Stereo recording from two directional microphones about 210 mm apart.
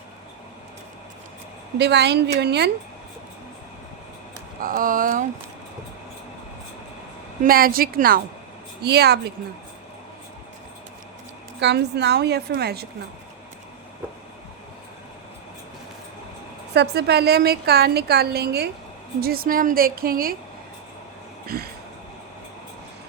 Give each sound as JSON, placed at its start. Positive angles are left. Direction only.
{"t": 1.8, "sound": "a woman's voice", "side_deg": -55}
{"t": 4.6, "sound": "speech", "side_deg": -40}
{"t": 7.4, "sound": "a woman's voice", "side_deg": -45}
{"t": 11.6, "sound": "a woman's voice", "side_deg": -55}
{"t": 16.7, "sound": "a woman's voice", "side_deg": -50}
{"t": 21.4, "sound": "a sound", "side_deg": -45}